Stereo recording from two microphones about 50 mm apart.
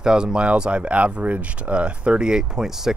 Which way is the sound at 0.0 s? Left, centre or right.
Centre.